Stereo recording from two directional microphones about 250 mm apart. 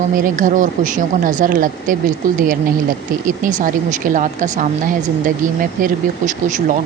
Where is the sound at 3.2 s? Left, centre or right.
Right.